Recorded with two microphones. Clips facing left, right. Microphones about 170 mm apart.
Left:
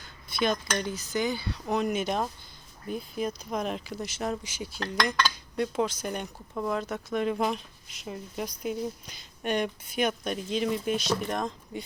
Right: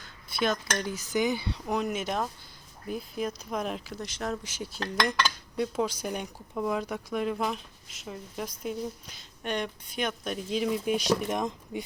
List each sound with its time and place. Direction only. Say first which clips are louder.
0.0 s speech: left 1 dB; 5° right (ahead or behind)
0.9 s speech: right 2 dB; 15° right (ahead or behind)
1.6 s speech: left 3 dB; 5° right (ahead or behind)